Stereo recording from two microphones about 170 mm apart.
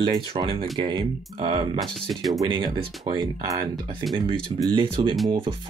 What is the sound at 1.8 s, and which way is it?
Speech, centre (ahead or behind).